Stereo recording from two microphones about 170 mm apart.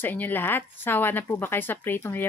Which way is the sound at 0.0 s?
10° left (ahead or behind).